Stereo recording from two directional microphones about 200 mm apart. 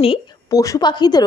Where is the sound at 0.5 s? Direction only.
15° left (ahead or behind).